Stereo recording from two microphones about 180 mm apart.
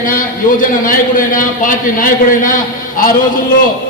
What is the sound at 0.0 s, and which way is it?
A man's voice, 50° left (ahead or behind).